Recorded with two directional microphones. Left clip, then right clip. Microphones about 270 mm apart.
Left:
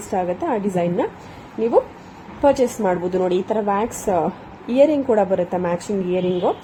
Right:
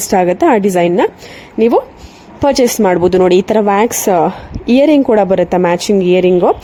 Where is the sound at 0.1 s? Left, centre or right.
Right.